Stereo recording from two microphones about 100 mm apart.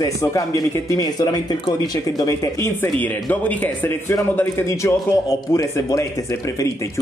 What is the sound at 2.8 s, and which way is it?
Speech, 15° left (ahead or behind).